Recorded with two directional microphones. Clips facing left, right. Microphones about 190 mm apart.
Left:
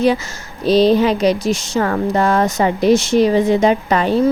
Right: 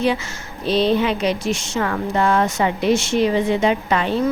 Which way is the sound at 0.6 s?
40° left (ahead or behind).